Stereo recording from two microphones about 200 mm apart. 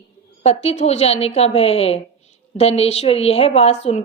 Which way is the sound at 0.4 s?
30° left (ahead or behind).